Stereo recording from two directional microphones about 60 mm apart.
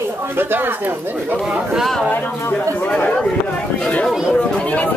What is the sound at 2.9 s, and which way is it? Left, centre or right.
Speech, centre.